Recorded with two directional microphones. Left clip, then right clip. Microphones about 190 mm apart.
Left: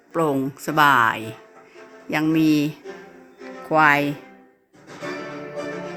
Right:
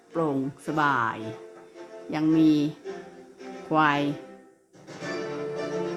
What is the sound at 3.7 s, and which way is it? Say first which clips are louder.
Speech: left 6 dB; 10° left (ahead or behind).